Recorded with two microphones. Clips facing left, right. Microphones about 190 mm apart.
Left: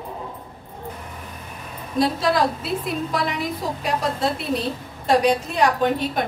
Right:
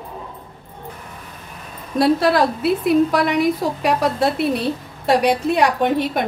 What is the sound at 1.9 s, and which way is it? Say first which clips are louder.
A woman's voice: right 5 dB; 65° right (ahead or behind).